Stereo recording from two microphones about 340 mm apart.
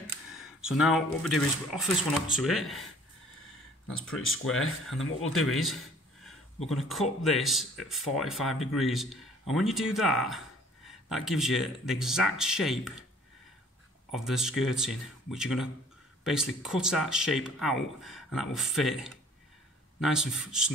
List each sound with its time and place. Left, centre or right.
0.3 s speech: centre
4.1 s speech: left
5.3 s speech: centre
14.1 s speech: centre